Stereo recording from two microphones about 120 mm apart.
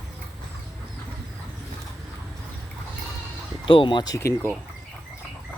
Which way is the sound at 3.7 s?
45° left (ahead or behind).